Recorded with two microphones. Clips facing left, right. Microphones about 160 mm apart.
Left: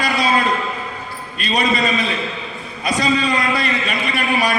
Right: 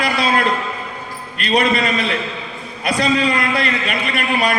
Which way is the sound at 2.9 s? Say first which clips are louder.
Right 1 dB; 60° right (ahead or behind).